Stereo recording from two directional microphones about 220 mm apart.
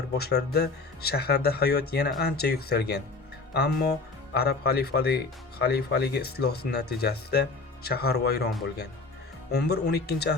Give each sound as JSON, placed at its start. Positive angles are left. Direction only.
{"t": 0.2, "sound": "speech", "side_deg": 45}
{"t": 9.5, "sound": "speech", "side_deg": 45}